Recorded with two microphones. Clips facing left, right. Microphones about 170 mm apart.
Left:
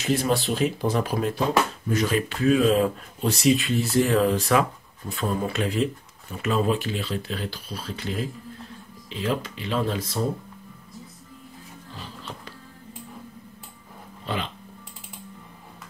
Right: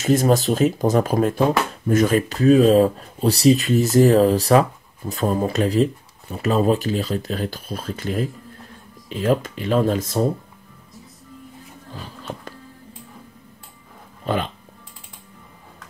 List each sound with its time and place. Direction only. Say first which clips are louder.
0.0 s speech: right 6 dB; 45° right (ahead or behind)
14.2 s speech: right 7 dB; 50° right (ahead or behind)